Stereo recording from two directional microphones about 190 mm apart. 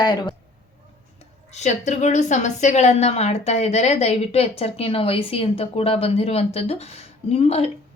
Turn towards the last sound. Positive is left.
turn(degrees=30)  # may be behind; listen again after turning